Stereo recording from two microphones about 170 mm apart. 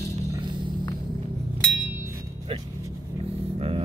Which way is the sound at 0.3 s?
25° right (ahead or behind).